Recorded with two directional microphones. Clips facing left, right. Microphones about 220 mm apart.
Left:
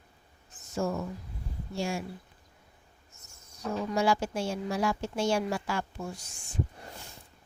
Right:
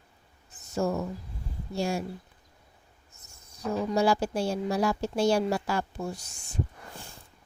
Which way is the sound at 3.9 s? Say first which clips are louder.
Right 2 dB; 35° right (ahead or behind).